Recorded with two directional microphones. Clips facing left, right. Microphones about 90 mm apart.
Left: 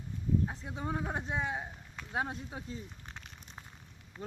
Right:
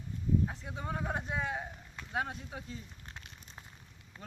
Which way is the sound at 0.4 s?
20° left (ahead or behind).